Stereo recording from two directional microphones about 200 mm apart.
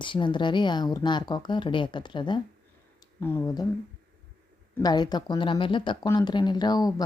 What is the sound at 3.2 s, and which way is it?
Speech, 10° left (ahead or behind).